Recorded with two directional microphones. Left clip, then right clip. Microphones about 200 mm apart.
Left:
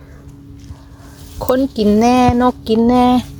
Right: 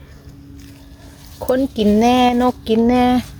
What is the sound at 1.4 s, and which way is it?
Speech, 15° left (ahead or behind).